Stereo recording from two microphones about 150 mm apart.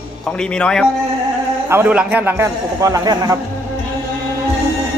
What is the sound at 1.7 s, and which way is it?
A man's voice, 10° right (ahead or behind).